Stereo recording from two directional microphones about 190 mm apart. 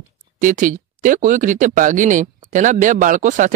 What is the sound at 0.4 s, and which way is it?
Speech, 45° right (ahead or behind).